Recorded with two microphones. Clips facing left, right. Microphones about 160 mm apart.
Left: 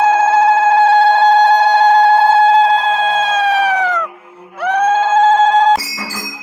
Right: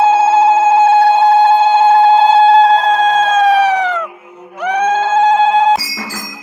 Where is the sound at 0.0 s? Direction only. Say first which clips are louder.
Right 2 dB; 25° right (ahead or behind).